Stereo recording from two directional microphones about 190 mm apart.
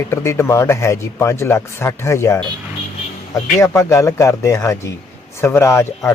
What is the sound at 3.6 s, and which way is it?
Speech, 15° left (ahead or behind).